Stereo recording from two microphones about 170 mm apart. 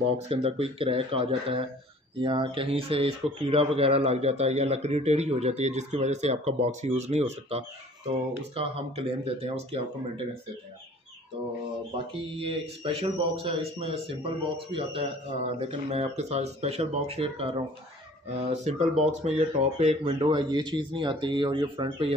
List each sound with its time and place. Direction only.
0.3 s speech: 35° right (ahead or behind)
12.4 s speech: 35° right (ahead or behind)
20.0 s speech: 25° right (ahead or behind)